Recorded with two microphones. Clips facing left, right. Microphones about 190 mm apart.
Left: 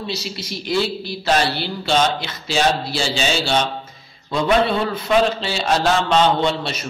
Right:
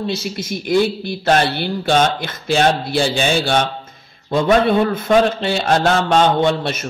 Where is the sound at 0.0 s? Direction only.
50° right (ahead or behind).